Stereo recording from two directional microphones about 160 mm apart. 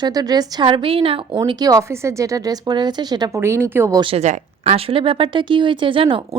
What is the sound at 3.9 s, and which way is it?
Speech, 35° right (ahead or behind).